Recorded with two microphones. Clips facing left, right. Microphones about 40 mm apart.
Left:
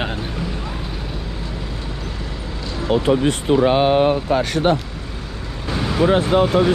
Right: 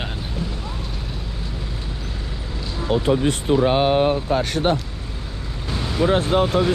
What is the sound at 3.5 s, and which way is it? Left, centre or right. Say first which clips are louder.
Speech: left 2 dB; left.